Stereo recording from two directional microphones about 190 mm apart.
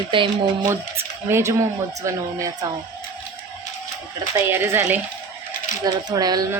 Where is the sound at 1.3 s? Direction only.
15° right (ahead or behind).